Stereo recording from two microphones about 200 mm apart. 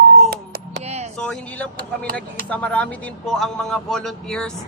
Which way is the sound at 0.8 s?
35° right (ahead or behind).